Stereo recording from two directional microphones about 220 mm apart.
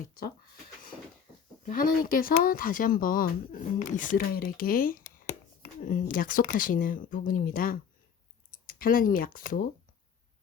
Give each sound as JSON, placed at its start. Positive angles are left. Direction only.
{"t": 1.6, "sound": "speech", "side_deg": 40}